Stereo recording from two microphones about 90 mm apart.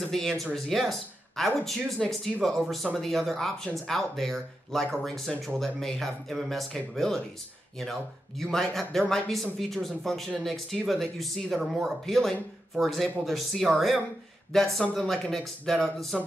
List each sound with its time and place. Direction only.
0.0 s speech: centre (ahead or behind)